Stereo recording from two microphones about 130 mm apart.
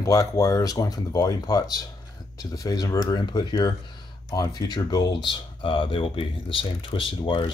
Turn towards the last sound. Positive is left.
turn(degrees=40)  # may be behind; listen again after turning